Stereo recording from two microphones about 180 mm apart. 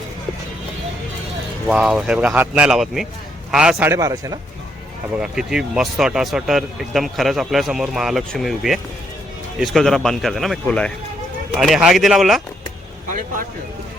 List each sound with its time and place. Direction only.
1.6 s speech: 5° right (ahead or behind)
5.1 s speech: 5° right (ahead or behind)
13.1 s speech: 50° right (ahead or behind)